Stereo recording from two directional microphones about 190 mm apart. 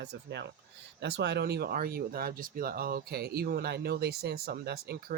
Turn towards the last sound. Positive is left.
turn(degrees=-55)  # may be behind; listen again after turning